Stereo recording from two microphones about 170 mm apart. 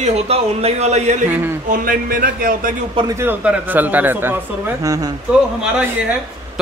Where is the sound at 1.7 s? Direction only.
55° right (ahead or behind).